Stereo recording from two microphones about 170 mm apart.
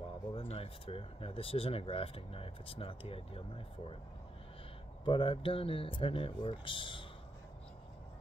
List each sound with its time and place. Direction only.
0.3 s speech: 35° left (ahead or behind)
5.0 s speech: 30° left (ahead or behind)